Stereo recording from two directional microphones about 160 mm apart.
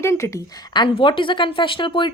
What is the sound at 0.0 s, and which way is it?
A woman's voice, 15° left (ahead or behind).